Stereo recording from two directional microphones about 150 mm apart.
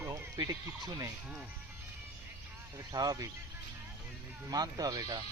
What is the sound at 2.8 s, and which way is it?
Speech, 25° right (ahead or behind).